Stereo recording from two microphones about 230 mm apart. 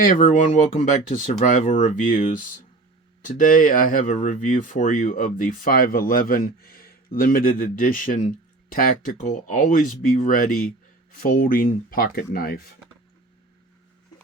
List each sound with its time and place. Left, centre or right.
0.0 s speech: left